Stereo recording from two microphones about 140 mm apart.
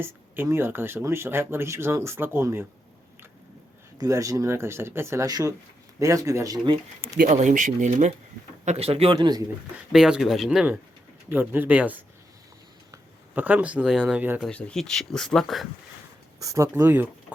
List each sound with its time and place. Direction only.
0.0 s speech: 15° right (ahead or behind)
3.9 s speech: 25° right (ahead or behind)
7.2 s speech: 60° right (ahead or behind)
8.6 s speech: 45° right (ahead or behind)
9.1 s speech: 30° right (ahead or behind)
9.9 s speech: 5° right (ahead or behind)
11.3 s speech: 15° right (ahead or behind)
14.4 s speech: 5° left (ahead or behind)
16.4 s speech: 25° right (ahead or behind)